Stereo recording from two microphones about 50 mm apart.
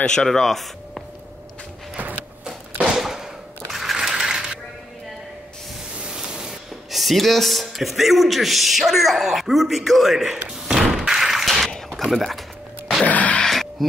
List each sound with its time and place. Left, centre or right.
0.0 s speech: centre
0.4 s speech: centre
2.4 s a sound: centre
3.7 s sewing machine: centre
5.9 s spray: centre
6.9 s a man's voice: centre
10.9 s a sound: centre
12.0 s speech: centre
13.0 s a sound: left
13.4 s gasp: centre